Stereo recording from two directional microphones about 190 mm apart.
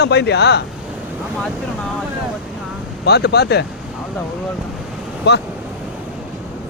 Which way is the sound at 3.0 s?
60° left (ahead or behind).